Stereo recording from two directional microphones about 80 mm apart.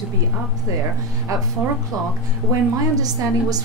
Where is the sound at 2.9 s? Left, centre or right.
Right.